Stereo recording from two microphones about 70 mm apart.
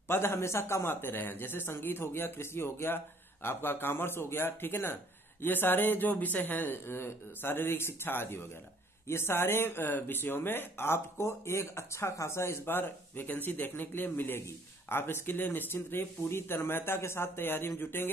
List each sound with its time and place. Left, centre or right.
0.1 s speech: left